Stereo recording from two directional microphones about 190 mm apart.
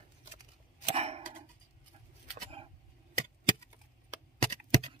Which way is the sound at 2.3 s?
30° right (ahead or behind).